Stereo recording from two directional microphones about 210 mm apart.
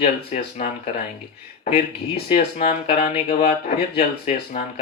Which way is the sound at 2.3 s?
30° left (ahead or behind).